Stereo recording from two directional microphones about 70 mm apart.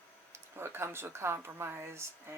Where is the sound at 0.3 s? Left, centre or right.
Right.